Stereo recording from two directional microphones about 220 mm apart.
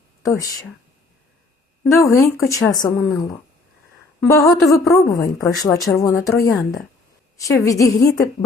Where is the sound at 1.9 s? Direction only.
15° left (ahead or behind).